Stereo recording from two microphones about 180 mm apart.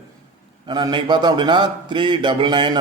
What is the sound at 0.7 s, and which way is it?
A man's voice, 25° right (ahead or behind).